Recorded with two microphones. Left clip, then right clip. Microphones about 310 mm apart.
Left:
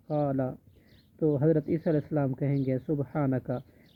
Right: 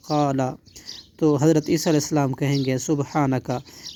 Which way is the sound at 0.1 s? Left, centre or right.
Right.